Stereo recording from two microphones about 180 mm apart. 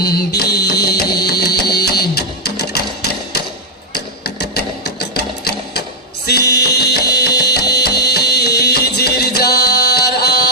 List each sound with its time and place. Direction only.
0.0 s music: 60° left (ahead or behind)
3.9 s sewing machine: 65° left (ahead or behind)
6.2 s music: 65° left (ahead or behind)